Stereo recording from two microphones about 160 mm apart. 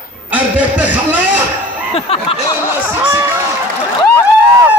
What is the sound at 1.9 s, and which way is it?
Speech, 35° left (ahead or behind).